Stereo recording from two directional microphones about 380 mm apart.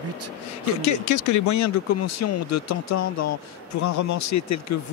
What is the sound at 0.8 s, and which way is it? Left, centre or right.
Speech, left.